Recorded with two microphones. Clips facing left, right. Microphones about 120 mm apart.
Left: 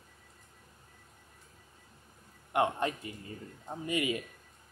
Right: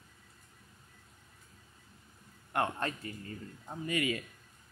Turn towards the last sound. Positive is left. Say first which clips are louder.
# left 1 dB
turn(degrees=20)  # may be behind; listen again after turning